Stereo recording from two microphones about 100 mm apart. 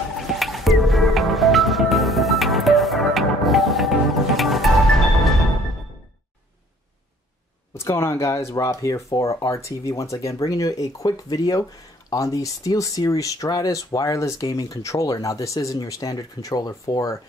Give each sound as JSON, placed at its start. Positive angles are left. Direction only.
{"t": 0.3, "sound": "music", "side_deg": 0}
{"t": 7.7, "sound": "speech", "side_deg": 25}